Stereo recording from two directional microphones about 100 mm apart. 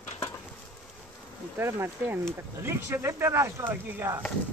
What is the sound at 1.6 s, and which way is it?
Speech, 25° right (ahead or behind).